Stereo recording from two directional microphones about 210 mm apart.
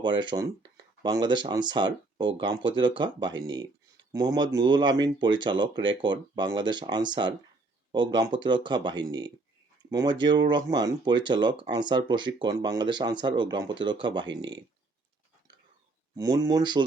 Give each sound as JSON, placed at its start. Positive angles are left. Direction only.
{"t": 0.0, "sound": "speech", "side_deg": -20}
{"t": 16.1, "sound": "speech", "side_deg": -15}